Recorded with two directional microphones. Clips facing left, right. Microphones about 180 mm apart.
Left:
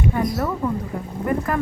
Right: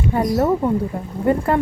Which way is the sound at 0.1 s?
30° right (ahead or behind).